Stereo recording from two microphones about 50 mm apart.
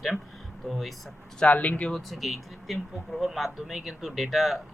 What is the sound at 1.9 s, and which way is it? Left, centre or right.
Speech, centre.